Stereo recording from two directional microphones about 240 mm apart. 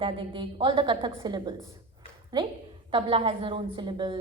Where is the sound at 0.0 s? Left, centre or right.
Right.